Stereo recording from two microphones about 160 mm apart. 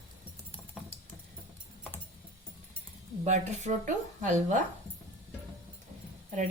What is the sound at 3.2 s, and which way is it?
A woman's voice, 45° right (ahead or behind).